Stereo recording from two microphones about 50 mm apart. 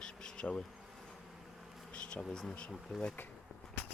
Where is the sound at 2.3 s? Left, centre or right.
Centre.